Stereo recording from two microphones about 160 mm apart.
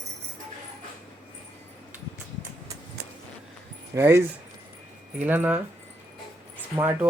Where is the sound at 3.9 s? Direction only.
15° right (ahead or behind).